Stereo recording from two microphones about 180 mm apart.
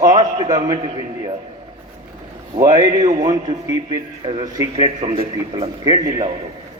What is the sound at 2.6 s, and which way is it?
A man's voice, 20° right (ahead or behind).